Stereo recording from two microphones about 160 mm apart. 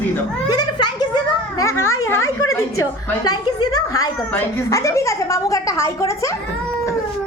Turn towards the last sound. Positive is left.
turn(degrees=20)  # may be behind; listen again after turning